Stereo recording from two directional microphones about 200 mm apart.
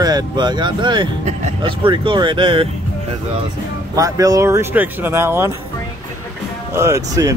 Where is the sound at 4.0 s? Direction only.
15° right (ahead or behind).